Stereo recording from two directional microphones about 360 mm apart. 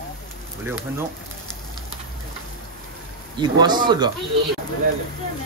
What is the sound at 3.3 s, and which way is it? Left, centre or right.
Speech, centre.